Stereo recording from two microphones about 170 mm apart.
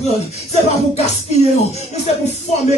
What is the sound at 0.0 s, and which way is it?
Speech, 40° left (ahead or behind).